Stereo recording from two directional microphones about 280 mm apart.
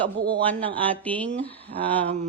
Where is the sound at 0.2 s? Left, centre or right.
Centre.